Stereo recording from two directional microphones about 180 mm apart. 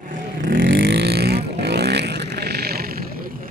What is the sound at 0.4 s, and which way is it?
Vehicle, 50° right (ahead or behind).